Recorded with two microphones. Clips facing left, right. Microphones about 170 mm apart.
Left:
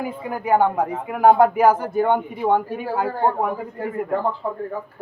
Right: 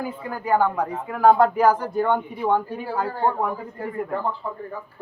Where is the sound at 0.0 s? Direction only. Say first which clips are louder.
Left 3 dB; 15° left (ahead or behind).